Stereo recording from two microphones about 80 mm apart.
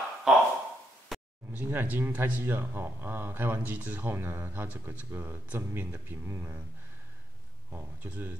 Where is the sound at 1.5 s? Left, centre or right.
Right.